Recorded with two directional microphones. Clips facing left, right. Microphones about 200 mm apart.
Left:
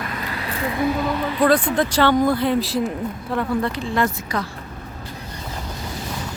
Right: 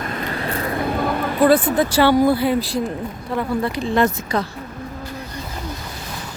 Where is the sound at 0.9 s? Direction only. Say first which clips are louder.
Even; 55° right (ahead or behind).